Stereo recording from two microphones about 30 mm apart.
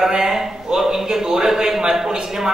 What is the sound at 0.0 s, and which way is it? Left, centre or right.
A man's voice, centre.